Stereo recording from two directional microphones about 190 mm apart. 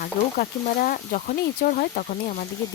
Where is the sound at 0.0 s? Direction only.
45° left (ahead or behind).